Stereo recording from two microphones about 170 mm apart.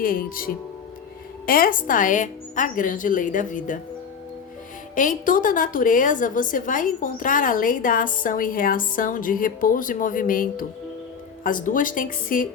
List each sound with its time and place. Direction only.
0.0 s a woman's voice: 55° left (ahead or behind)
4.9 s a woman's voice: 50° left (ahead or behind)